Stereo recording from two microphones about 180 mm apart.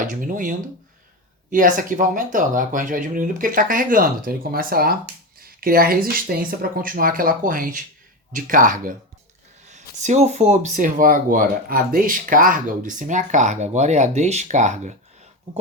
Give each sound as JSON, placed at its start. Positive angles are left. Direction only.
{"t": 0.0, "sound": "speech", "side_deg": -45}